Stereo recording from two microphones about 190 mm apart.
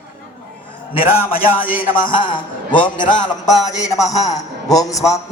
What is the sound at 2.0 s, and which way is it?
A man's voice, 25° left (ahead or behind).